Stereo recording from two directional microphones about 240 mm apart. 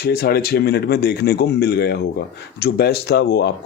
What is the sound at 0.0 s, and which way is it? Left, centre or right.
Speech, left.